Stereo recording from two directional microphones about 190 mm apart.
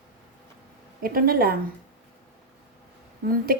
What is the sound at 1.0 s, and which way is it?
Speech, 50° right (ahead or behind).